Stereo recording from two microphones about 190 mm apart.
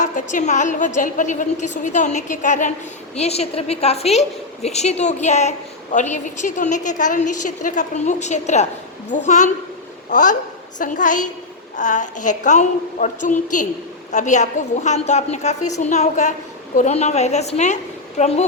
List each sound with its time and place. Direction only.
0.0 s a woman's voice: 40° left (ahead or behind)